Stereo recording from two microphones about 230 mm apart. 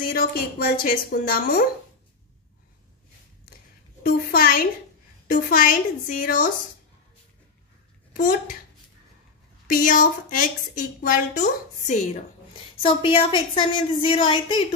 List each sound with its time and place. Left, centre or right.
0.0 s speech: left
4.0 s speech: left
8.1 s speech: left
9.7 s speech: left